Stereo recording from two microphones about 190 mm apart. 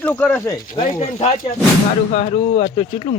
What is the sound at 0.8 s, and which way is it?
Speech, 35° left (ahead or behind).